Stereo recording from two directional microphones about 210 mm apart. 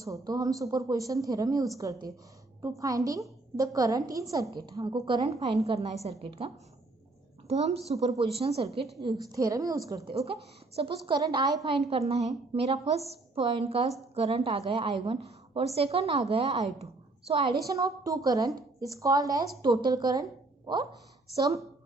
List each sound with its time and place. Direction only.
0.0 s a woman's voice: 15° right (ahead or behind)
9.3 s a woman's voice: 15° right (ahead or behind)
21.3 s a woman's voice: 15° right (ahead or behind)